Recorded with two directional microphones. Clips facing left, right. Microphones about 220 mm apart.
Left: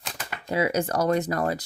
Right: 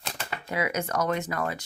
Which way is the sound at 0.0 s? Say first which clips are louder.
Right 1 dB; centre (ahead or behind).